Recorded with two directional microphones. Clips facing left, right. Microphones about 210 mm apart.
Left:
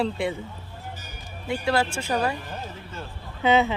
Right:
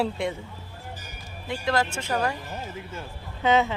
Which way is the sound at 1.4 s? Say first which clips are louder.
Left 2 dB; 10° left (ahead or behind).